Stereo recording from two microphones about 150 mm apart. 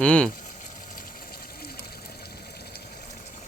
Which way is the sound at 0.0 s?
5° left (ahead or behind).